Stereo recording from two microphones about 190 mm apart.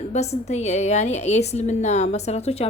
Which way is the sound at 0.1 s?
35° left (ahead or behind).